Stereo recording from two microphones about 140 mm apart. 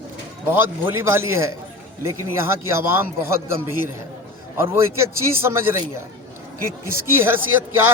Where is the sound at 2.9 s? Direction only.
15° right (ahead or behind).